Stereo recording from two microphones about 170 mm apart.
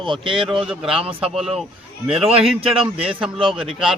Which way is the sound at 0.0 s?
30° right (ahead or behind).